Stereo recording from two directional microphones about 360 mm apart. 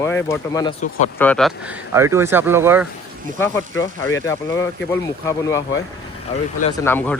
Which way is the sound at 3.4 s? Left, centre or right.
Centre.